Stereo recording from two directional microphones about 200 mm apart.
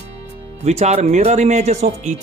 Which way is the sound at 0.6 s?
35° right (ahead or behind).